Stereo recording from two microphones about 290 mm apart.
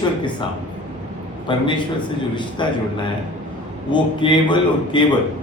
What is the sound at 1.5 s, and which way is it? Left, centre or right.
A man's voice, centre.